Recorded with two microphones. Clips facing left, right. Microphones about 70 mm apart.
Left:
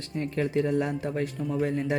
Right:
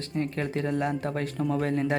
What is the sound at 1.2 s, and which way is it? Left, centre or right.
Speech, right.